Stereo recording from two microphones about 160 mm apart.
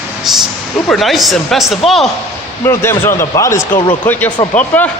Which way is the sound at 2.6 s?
15° left (ahead or behind).